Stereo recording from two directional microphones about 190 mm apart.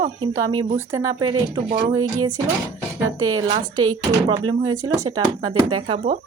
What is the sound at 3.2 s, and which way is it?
Speech, 25° right (ahead or behind).